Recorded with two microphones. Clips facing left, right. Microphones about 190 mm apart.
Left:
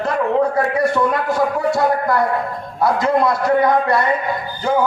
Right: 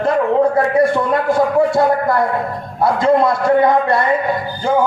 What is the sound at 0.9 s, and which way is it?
Speech, 55° right (ahead or behind).